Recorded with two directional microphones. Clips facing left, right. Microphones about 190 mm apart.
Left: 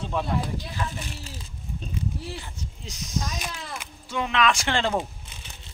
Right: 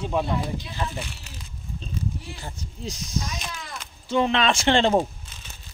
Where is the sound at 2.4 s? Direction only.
35° right (ahead or behind).